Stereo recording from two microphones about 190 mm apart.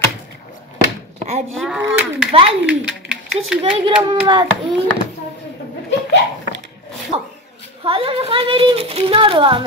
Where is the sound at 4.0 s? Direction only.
25° right (ahead or behind).